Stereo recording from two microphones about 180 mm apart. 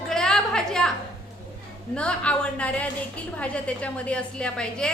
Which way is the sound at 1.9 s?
5° left (ahead or behind).